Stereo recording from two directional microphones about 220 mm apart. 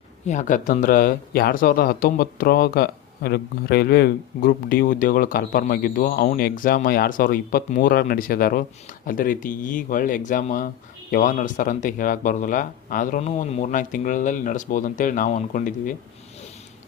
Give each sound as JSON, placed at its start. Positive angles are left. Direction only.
{"t": 0.3, "sound": "speech", "side_deg": 35}